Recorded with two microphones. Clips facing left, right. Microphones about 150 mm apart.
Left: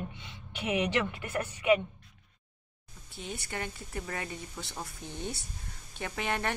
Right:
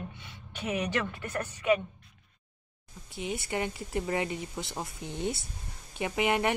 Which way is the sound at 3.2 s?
15° right (ahead or behind).